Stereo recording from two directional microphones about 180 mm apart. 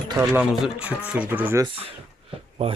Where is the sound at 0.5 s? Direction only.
5° right (ahead or behind).